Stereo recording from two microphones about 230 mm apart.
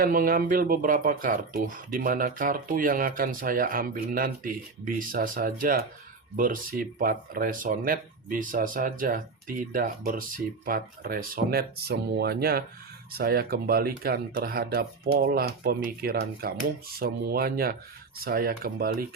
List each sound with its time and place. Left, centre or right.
0.0 s speech: right